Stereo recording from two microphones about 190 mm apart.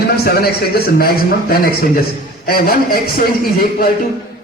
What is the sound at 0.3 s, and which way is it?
Speech, 55° left (ahead or behind).